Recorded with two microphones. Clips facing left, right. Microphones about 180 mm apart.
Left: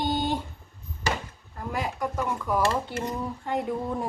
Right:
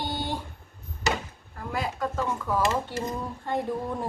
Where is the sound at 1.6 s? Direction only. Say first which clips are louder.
Even; 20° left (ahead or behind).